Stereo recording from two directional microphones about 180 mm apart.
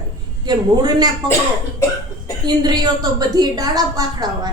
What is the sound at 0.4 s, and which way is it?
Speech, 25° right (ahead or behind).